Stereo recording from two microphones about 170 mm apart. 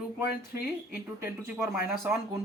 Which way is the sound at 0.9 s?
15° right (ahead or behind).